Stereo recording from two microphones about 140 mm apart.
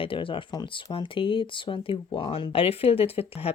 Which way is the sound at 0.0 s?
40° left (ahead or behind).